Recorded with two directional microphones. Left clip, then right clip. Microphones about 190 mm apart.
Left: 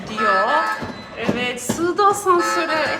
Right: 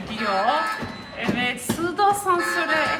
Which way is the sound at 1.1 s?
5° left (ahead or behind).